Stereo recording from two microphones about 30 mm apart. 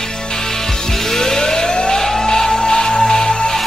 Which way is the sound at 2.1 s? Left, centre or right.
Centre.